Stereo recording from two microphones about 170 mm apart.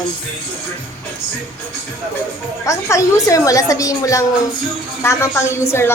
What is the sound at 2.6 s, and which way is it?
A woman's voice, 20° left (ahead or behind).